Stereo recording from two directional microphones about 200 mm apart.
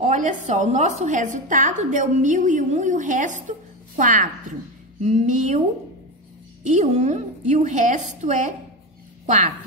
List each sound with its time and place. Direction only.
0.0 s a woman's voice: 35° right (ahead or behind)
6.6 s a woman's voice: 35° right (ahead or behind)